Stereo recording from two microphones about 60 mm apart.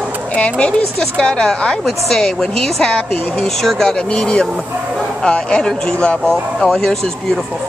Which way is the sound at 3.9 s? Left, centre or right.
Centre.